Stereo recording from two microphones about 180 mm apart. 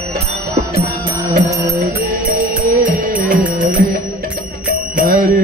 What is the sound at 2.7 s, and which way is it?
Music, 45° right (ahead or behind).